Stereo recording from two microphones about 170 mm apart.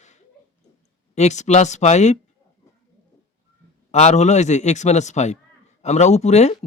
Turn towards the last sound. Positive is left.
turn(degrees=40)  # may be behind; listen again after turning